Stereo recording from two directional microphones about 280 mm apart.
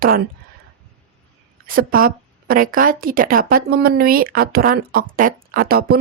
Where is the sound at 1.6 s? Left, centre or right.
Right.